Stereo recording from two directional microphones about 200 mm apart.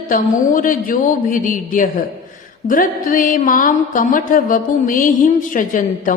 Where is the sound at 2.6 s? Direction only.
45° left (ahead or behind).